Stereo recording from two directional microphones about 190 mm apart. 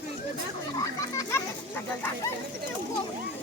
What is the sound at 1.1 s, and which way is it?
Children playing, 10° left (ahead or behind).